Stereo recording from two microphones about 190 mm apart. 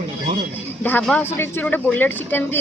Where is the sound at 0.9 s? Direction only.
10° left (ahead or behind).